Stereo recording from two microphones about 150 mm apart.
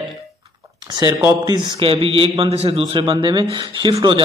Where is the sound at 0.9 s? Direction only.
25° right (ahead or behind).